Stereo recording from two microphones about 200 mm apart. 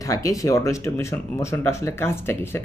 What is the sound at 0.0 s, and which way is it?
Speech, 15° left (ahead or behind).